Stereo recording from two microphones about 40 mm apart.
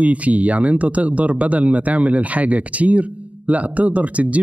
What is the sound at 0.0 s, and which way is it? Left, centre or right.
Speech, right.